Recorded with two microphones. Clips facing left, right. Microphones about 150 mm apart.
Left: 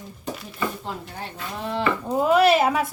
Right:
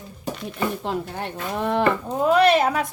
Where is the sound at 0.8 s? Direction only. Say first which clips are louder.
Right 6 dB; 60° right (ahead or behind).